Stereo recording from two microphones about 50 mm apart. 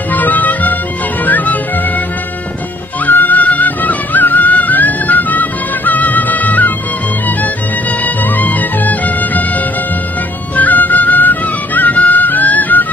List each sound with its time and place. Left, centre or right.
0.1 s music: left
3.1 s music: left
8.0 s music: left